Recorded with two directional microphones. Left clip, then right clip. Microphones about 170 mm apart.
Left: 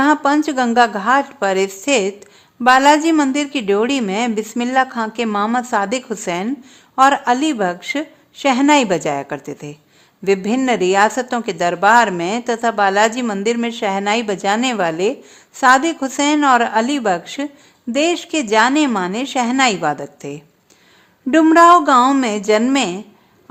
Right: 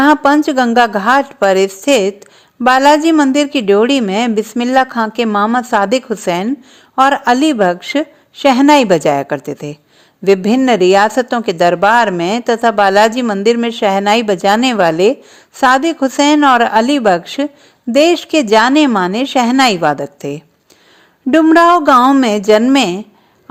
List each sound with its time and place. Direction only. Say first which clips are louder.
0.0 s a woman's voice: right 5 dB; 30° right (ahead or behind)